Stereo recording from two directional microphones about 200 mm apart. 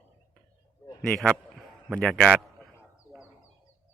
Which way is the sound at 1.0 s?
Centre (ahead or behind).